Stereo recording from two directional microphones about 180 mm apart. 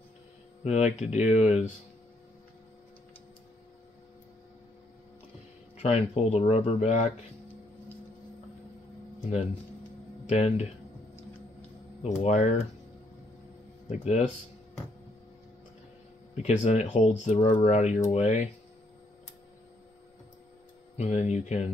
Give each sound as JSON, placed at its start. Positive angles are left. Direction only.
{"t": 0.7, "sound": "speech", "side_deg": 40}
{"t": 5.8, "sound": "speech", "side_deg": 35}
{"t": 10.2, "sound": "speech", "side_deg": 35}
{"t": 12.2, "sound": "speech", "side_deg": 40}
{"t": 13.8, "sound": "speech", "side_deg": 40}
{"t": 16.4, "sound": "speech", "side_deg": 40}
{"t": 20.9, "sound": "speech", "side_deg": 40}